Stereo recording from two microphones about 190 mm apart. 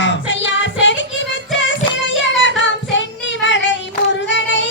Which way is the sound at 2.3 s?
75° left (ahead or behind).